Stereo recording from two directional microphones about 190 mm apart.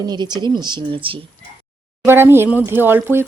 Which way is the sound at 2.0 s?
10° right (ahead or behind).